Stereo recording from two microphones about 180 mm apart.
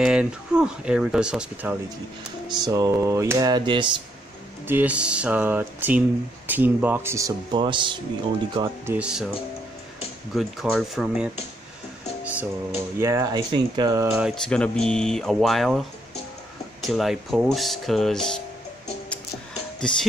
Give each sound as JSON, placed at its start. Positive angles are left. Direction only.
{"t": 0.0, "sound": "speech", "side_deg": -5}
{"t": 2.5, "sound": "speech", "side_deg": -20}
{"t": 4.6, "sound": "speech", "side_deg": -10}
{"t": 8.6, "sound": "speech", "side_deg": -10}
{"t": 10.3, "sound": "speech", "side_deg": 0}
{"t": 12.3, "sound": "speech", "side_deg": -10}
{"t": 14.1, "sound": "speech", "side_deg": 0}
{"t": 16.8, "sound": "speech", "side_deg": 0}